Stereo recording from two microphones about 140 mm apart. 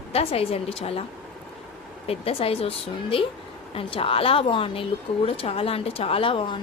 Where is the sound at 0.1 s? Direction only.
45° left (ahead or behind).